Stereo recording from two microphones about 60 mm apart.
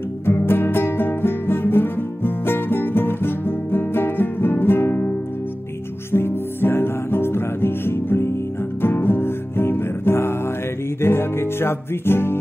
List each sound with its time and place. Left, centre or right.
0.2 s music: left
6.1 s music: left